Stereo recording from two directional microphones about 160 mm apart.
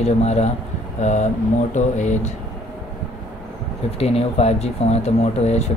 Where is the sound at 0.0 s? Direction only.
40° left (ahead or behind).